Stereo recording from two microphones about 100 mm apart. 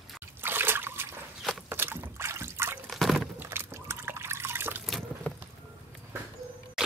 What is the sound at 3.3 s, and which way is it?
Liquid, 25° right (ahead or behind).